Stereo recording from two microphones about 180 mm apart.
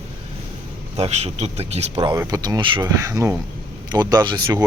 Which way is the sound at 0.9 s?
35° right (ahead or behind).